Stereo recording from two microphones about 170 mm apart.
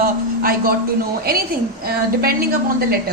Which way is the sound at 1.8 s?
60° right (ahead or behind).